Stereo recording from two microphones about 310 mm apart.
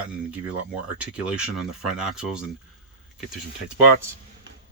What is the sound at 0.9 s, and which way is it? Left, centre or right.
Speech, centre.